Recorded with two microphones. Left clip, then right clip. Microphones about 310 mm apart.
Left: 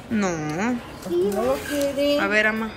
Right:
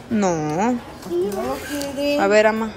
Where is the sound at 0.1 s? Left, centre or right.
Centre.